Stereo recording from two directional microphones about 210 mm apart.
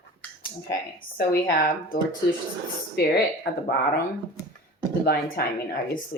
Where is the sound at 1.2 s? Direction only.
45° left (ahead or behind).